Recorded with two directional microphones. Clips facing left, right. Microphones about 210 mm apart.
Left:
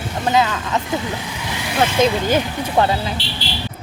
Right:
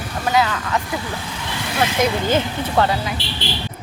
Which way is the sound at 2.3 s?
15° left (ahead or behind).